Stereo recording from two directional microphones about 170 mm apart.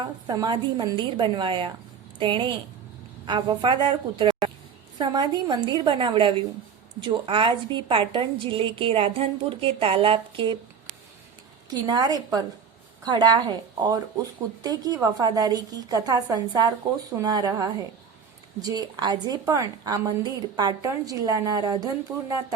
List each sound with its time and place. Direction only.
0.3 s a woman's voice: 25° right (ahead or behind)
11.7 s a woman's voice: 25° right (ahead or behind)